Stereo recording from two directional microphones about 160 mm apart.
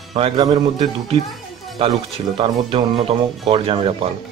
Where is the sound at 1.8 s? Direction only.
35° right (ahead or behind).